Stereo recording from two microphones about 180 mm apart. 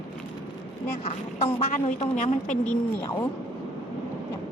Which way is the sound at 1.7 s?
40° left (ahead or behind).